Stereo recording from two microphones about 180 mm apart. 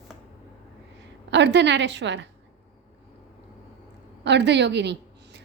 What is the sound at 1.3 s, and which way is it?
Speech, 75° right (ahead or behind).